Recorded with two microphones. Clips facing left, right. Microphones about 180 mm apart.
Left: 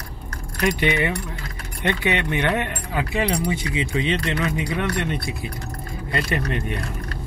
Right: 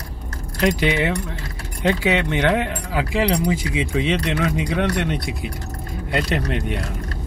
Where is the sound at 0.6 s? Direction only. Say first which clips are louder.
Right 2 dB; 90° right.